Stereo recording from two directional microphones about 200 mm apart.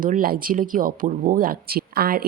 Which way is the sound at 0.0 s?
45° right (ahead or behind).